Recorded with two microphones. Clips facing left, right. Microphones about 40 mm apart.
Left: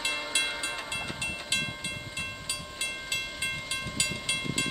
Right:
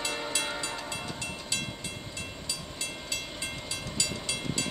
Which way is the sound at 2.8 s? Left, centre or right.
Left.